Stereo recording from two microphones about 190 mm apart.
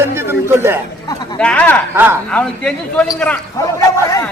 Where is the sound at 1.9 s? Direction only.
10° right (ahead or behind).